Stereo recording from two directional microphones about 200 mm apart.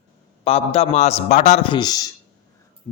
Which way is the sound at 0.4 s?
30° left (ahead or behind).